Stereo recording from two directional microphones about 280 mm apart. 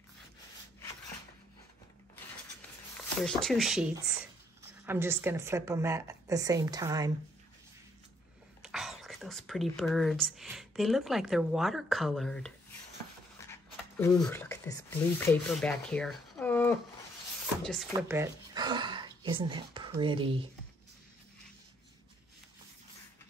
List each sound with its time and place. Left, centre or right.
3.3 s a woman's voice: centre
8.6 s speech: centre
17.9 s speech: centre